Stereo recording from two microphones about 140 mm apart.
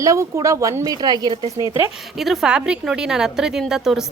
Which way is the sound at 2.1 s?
Centre (ahead or behind).